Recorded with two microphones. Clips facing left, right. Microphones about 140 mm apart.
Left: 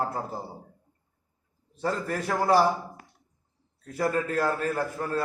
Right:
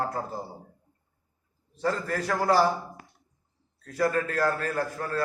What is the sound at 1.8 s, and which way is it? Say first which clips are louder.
Speech: right 1 dB; 25° left (ahead or behind).